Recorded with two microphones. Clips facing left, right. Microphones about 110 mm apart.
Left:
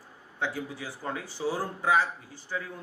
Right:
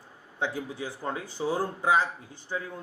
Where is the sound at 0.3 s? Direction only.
20° right (ahead or behind).